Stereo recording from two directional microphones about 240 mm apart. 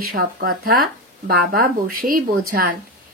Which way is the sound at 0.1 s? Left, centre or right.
Right.